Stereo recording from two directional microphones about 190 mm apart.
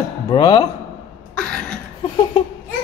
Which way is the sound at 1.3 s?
5° left (ahead or behind).